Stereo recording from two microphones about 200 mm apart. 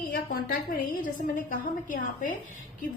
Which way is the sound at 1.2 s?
40° left (ahead or behind).